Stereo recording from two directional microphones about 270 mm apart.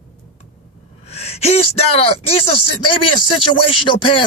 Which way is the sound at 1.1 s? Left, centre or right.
Left.